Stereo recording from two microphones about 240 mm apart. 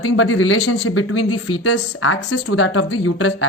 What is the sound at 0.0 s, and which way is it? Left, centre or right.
A woman's voice, left.